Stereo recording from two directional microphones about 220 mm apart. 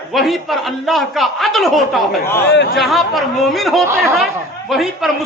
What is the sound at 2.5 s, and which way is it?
Speech, 50° left (ahead or behind).